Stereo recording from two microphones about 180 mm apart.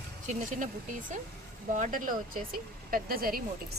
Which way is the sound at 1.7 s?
45° right (ahead or behind).